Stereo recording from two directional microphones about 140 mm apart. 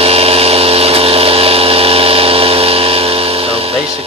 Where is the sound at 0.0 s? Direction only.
45° right (ahead or behind).